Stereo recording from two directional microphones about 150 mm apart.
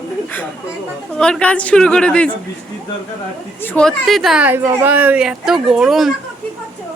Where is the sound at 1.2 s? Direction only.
5° left (ahead or behind).